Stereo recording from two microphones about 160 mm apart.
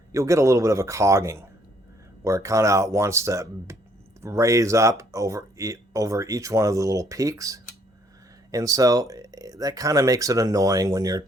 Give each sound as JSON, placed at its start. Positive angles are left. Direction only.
{"t": 0.1, "sound": "speech", "side_deg": -20}